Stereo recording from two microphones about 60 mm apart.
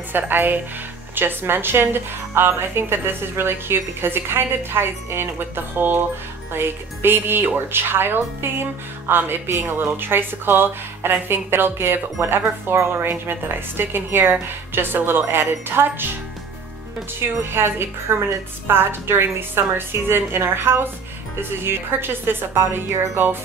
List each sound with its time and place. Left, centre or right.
0.1 s speech: right
17.5 s speech: right